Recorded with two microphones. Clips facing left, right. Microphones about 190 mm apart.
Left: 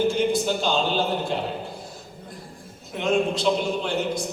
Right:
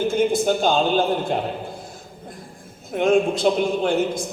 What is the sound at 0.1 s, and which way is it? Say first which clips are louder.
Speech: right 3 dB; 50° right (ahead or behind).